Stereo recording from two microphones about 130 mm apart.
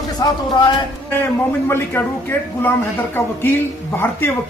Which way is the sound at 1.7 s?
15° left (ahead or behind).